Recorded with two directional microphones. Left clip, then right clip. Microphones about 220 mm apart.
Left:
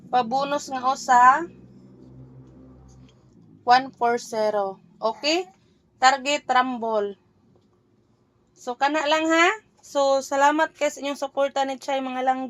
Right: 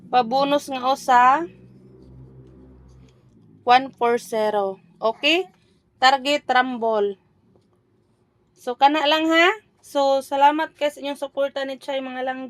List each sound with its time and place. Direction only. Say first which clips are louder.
0.1 s a woman's voice: right 4 dB; 40° right (ahead or behind)
3.6 s a woman's voice: right 2 dB; 40° right (ahead or behind)
8.5 s a woman's voice: right 5 dB; 35° right (ahead or behind)
10.2 s speech: right 2 dB; 10° right (ahead or behind)